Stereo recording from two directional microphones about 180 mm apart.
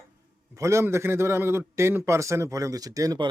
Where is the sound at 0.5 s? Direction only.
15° right (ahead or behind).